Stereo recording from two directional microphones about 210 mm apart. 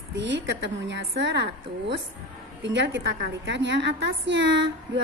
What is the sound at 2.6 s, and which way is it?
A woman's voice, 60° right (ahead or behind).